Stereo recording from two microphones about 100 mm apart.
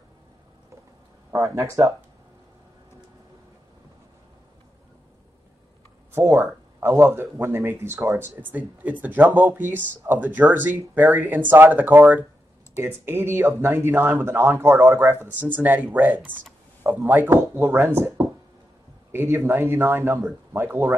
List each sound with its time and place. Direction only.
1.3 s speech: 30° right (ahead or behind)
6.1 s speech: 20° right (ahead or behind)
19.1 s speech: 25° right (ahead or behind)